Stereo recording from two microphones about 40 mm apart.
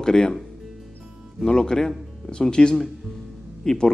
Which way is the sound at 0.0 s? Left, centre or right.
Centre.